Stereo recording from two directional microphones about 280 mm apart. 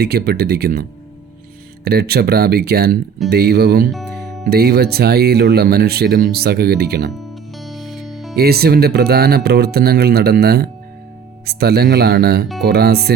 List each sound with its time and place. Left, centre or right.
0.0 s speech: right
3.9 s music: centre
4.4 s speech: right
7.6 s music: centre
8.4 s speech: right